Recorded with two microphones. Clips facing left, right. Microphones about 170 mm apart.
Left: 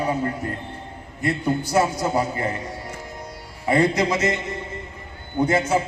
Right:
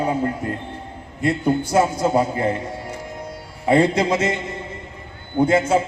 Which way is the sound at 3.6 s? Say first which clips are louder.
Right 3 dB; 25° right (ahead or behind).